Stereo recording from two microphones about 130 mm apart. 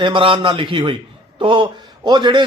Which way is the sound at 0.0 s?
40° right (ahead or behind).